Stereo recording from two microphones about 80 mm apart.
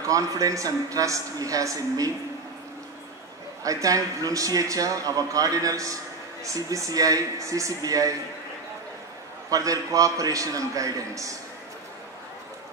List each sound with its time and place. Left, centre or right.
0.0 s a man's voice: right
3.6 s a man's voice: right
9.5 s a man's voice: right